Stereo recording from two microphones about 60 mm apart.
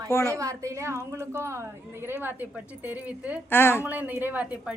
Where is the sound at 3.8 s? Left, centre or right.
Right.